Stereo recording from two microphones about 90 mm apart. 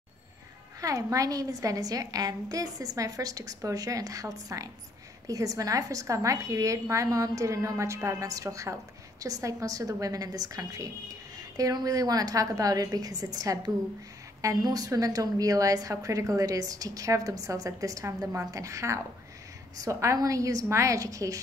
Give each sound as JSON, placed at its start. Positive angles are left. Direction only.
{"t": 0.7, "sound": "a woman's voice", "side_deg": -40}